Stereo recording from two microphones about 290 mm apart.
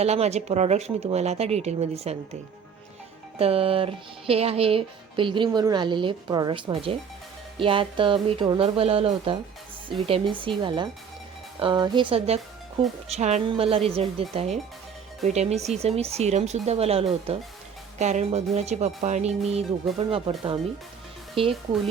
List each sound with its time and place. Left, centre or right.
0.0 s speech: right
10.6 s speech: centre
21.4 s speech: centre